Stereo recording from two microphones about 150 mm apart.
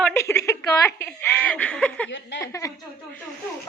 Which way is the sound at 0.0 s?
15° left (ahead or behind).